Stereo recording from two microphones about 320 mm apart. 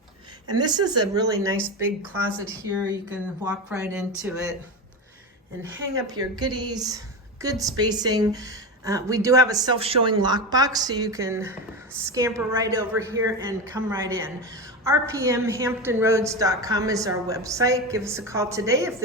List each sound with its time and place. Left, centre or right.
0.5 s a woman's voice: centre
5.9 s a woman's voice: centre